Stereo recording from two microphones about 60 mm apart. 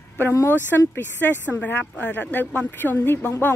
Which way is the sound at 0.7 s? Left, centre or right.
Left.